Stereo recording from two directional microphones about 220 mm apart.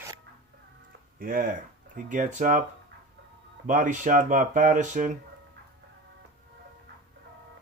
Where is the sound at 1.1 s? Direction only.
40° right (ahead or behind).